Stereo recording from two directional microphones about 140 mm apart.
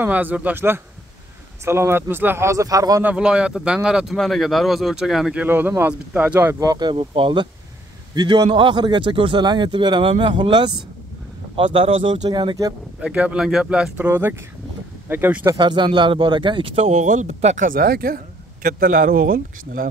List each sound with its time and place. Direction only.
0.0 s speech: 10° right (ahead or behind)
3.0 s speech: 10° right (ahead or behind)
6.6 s speech: 30° right (ahead or behind)
13.0 s speech: 10° right (ahead or behind)
15.5 s speech: 35° right (ahead or behind)
16.8 s speech: 60° right (ahead or behind); by 19.9 s 90° right